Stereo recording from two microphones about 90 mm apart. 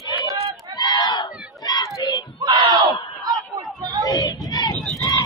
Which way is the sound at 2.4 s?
70° right (ahead or behind).